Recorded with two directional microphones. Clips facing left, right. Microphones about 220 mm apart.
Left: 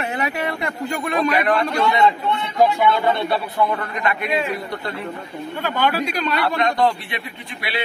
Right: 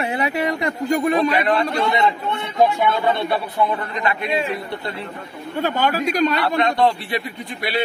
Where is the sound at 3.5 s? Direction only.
20° right (ahead or behind).